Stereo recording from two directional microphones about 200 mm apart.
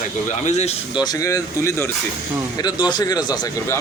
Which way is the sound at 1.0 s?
15° left (ahead or behind).